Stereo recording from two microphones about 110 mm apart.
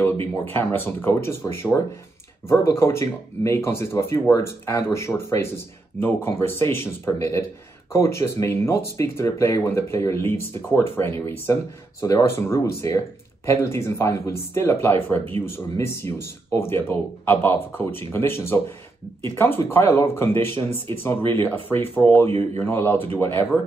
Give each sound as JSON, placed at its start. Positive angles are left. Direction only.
{"t": 0.5, "sound": "speech", "side_deg": 20}